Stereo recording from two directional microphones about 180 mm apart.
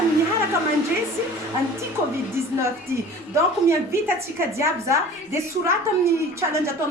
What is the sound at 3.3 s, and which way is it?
A woman's voice, 15° right (ahead or behind).